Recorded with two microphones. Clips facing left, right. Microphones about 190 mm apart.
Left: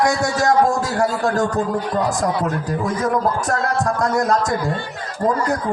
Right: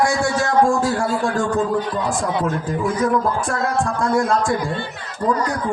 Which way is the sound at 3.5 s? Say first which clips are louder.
Left 1 dB; 40° left (ahead or behind).